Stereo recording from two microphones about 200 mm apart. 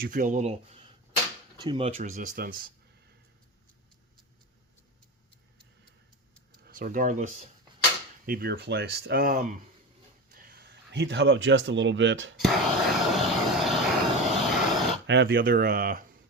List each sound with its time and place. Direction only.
0.0 s speech: 40° right (ahead or behind)
1.5 s speech: 20° right (ahead or behind); by 2.7 s 45° right (ahead or behind)
6.7 s speech: 45° right (ahead or behind)
8.3 s speech: 50° right (ahead or behind)
10.3 s speech: 50° right (ahead or behind); by 12.3 s 70° right (ahead or behind)
12.4 s vehicle: centre (ahead or behind)
15.0 s speech: 60° right (ahead or behind)